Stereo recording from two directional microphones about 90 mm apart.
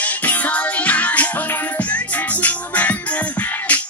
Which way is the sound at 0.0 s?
20° left (ahead or behind).